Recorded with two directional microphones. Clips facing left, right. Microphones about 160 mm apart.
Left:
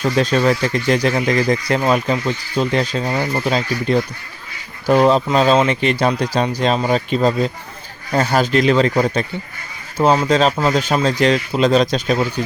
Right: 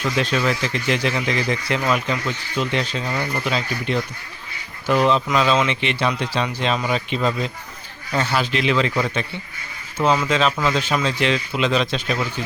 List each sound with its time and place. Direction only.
0.0 s speech: 40° left (ahead or behind)